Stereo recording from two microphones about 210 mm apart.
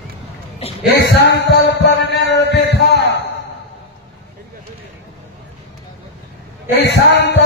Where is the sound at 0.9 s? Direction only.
55° left (ahead or behind).